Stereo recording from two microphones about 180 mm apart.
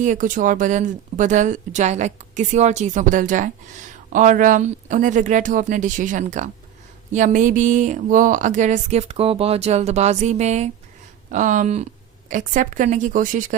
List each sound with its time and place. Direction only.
0.0 s speech: 45° right (ahead or behind)